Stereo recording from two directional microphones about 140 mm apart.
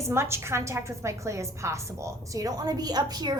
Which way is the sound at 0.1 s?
20° right (ahead or behind).